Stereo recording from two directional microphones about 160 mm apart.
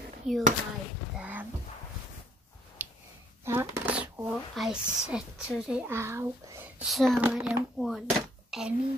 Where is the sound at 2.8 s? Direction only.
10° right (ahead or behind).